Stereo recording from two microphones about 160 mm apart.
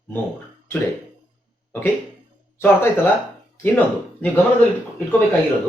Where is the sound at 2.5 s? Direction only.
15° left (ahead or behind).